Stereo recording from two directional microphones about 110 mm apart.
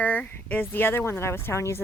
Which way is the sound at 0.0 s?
15° left (ahead or behind).